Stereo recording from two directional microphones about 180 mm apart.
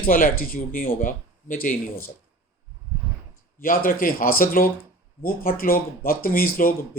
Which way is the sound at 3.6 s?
50° left (ahead or behind).